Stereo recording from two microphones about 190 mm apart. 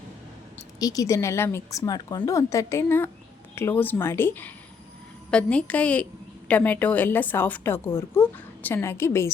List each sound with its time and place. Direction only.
0.8 s a woman's voice: 20° left (ahead or behind)